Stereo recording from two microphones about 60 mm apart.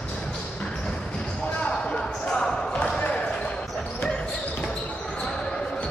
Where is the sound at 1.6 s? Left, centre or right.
Centre.